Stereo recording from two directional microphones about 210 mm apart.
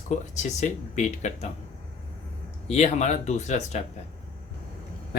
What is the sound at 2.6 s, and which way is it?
Speech, 30° left (ahead or behind).